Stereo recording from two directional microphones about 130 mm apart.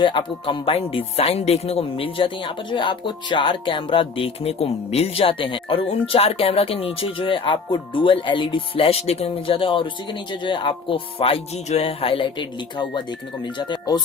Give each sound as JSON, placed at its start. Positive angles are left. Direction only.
{"t": 0.0, "sound": "speech", "side_deg": 40}